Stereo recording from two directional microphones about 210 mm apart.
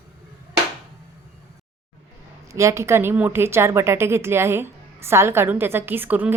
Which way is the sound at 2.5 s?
15° right (ahead or behind).